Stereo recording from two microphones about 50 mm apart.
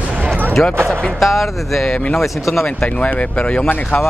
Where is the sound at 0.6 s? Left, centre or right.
Centre.